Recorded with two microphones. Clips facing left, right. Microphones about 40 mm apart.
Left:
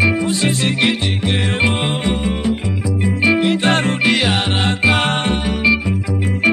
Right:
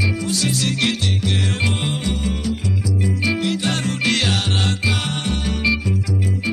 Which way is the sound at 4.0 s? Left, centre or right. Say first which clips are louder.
Left 4 dB; centre.